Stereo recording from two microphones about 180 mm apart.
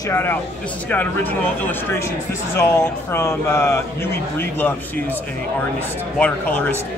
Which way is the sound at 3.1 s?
15° left (ahead or behind).